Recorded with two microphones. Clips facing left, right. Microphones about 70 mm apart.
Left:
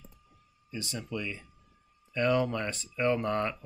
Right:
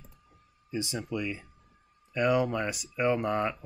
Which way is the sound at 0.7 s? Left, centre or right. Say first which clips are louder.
Right 4 dB; right.